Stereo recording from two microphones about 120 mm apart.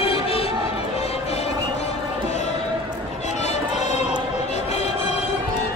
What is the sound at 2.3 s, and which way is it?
Basketball bounce, 70° left (ahead or behind).